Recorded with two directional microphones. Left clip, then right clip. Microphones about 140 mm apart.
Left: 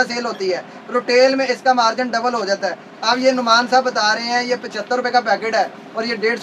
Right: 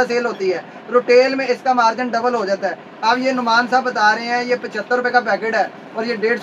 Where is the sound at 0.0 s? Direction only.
5° right (ahead or behind).